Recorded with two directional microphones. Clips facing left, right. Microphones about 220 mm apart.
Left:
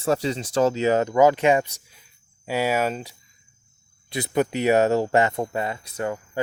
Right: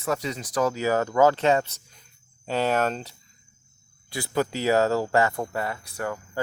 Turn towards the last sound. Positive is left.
turn(degrees=20)  # may be behind; listen again after turning